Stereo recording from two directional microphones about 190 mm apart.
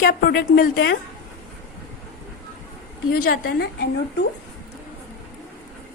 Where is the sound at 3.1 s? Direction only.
55° left (ahead or behind).